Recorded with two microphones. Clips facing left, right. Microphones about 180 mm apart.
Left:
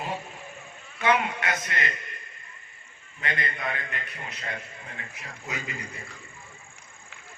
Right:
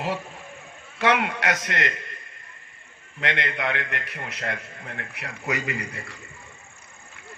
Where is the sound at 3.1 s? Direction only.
75° right (ahead or behind).